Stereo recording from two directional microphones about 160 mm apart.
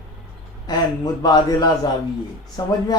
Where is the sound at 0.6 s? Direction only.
25° left (ahead or behind).